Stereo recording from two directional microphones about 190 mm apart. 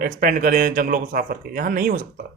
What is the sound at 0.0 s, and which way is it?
Speech, 50° right (ahead or behind).